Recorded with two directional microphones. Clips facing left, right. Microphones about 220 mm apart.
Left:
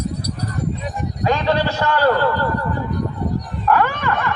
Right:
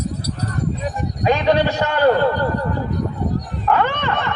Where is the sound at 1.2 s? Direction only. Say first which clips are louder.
Right 2 dB; 15° right (ahead or behind).